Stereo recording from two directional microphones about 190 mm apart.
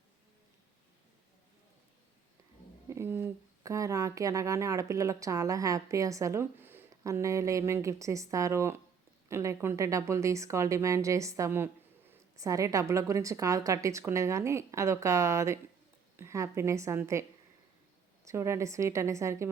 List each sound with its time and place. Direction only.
2.9 s speech: 10° right (ahead or behind)
18.3 s speech: 15° right (ahead or behind)